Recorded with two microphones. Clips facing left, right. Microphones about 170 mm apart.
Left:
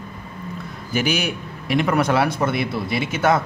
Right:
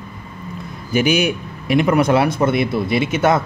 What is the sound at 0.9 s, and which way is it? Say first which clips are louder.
A man's voice: right 6 dB; 15° right (ahead or behind).